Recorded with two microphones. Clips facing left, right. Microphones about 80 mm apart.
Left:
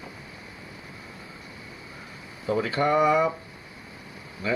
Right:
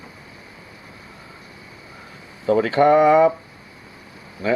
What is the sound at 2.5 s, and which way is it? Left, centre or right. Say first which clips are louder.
Speech: right 8 dB; right.